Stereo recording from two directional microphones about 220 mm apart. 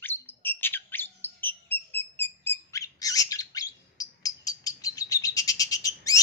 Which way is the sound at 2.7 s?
15° left (ahead or behind).